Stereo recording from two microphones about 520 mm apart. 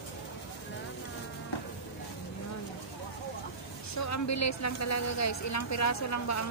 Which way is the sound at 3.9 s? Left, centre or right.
Left.